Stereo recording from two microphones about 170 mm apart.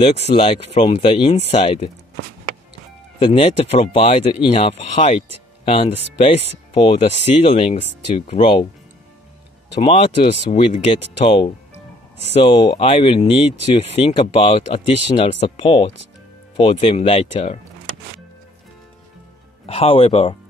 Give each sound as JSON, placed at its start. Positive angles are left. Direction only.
{"t": 0.1, "sound": "speech", "side_deg": 40}
{"t": 3.2, "sound": "speech", "side_deg": 35}
{"t": 9.8, "sound": "speech", "side_deg": 35}
{"t": 19.6, "sound": "speech", "side_deg": 35}